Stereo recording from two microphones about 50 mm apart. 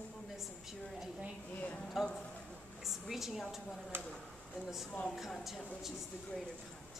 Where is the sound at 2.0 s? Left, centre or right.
Centre.